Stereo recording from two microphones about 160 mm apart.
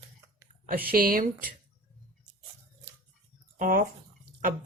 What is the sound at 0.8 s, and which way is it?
Speech, 65° right (ahead or behind).